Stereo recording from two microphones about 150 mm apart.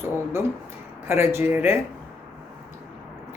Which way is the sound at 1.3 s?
15° right (ahead or behind).